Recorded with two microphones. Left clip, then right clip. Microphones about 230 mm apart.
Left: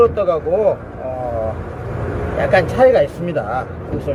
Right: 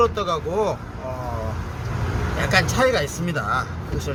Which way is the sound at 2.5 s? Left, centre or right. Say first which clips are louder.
Left 7 dB; right.